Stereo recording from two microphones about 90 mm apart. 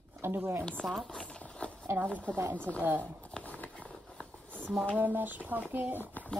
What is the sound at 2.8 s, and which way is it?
Speech, 25° right (ahead or behind).